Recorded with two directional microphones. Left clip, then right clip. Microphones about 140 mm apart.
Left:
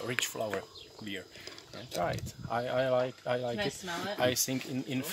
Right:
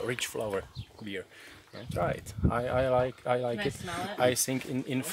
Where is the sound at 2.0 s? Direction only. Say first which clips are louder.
Right 3 dB; 60° right (ahead or behind).